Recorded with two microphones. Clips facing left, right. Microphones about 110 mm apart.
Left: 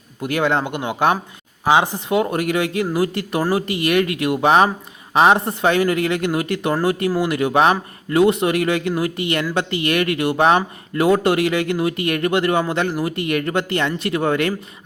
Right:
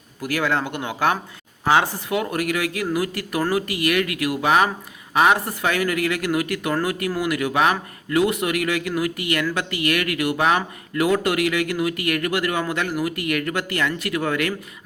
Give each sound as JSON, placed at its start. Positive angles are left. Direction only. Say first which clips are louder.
{"t": 0.2, "sound": "a man's voice", "louder": "left 3 dB", "side_deg": 25}